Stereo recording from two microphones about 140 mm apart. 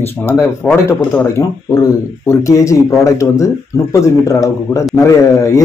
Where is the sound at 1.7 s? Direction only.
25° left (ahead or behind).